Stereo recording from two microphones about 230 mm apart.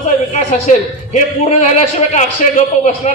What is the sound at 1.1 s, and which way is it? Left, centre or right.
A man's voice, left.